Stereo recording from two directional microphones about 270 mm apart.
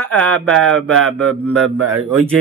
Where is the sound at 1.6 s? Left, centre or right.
Right.